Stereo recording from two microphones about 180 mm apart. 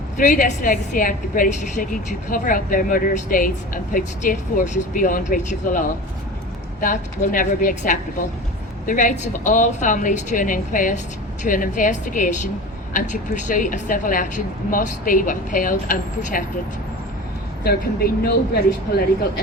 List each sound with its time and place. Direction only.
0.2 s a woman's voice: 45° left (ahead or behind)
6.8 s a woman's voice: 45° left (ahead or behind)
17.6 s speech: 60° left (ahead or behind)